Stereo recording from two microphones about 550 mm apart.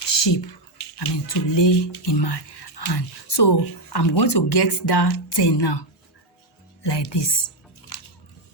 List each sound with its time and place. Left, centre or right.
0.1 s a sound: left
0.9 s speech: left
6.8 s speech: left